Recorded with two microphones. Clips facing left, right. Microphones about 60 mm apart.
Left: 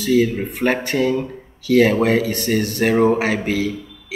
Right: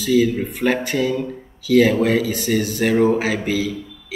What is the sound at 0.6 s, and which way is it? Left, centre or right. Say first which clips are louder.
Speech: left 1 dB; left.